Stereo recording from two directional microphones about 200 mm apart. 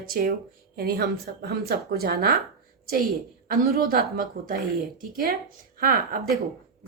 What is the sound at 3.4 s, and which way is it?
A woman's voice, 50° right (ahead or behind).